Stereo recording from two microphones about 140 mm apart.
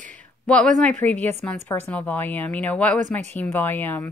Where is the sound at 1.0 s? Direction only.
10° left (ahead or behind).